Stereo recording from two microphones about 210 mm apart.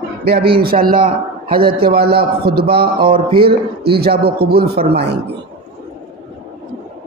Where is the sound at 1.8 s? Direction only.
45° right (ahead or behind).